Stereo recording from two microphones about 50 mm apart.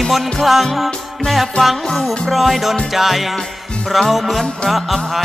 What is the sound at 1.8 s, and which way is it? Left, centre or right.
Music, centre.